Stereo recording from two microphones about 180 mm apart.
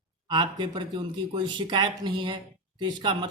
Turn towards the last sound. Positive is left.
turn(degrees=-25)  # may be behind; listen again after turning